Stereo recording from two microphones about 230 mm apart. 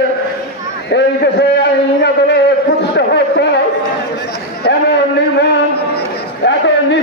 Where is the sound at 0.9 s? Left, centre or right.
Left.